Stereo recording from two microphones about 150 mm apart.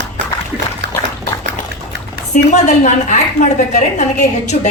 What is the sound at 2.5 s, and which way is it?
A man's voice, 50° left (ahead or behind).